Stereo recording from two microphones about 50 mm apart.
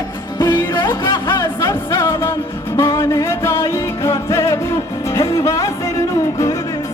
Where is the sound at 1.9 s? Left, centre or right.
Left.